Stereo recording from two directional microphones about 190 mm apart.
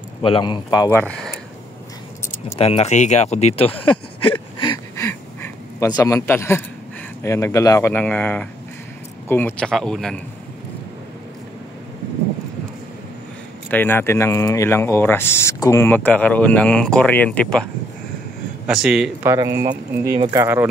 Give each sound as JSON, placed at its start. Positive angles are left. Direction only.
{"t": 0.2, "sound": "speech", "side_deg": 25}
{"t": 2.5, "sound": "speech", "side_deg": 30}
{"t": 13.7, "sound": "speech", "side_deg": 10}
{"t": 18.7, "sound": "speech", "side_deg": -5}
{"t": 19.2, "sound": "speech", "side_deg": -15}